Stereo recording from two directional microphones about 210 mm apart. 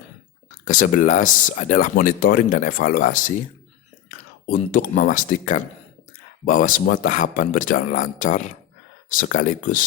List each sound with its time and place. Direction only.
0.6 s speech: 40° left (ahead or behind)
4.4 s speech: 40° left (ahead or behind)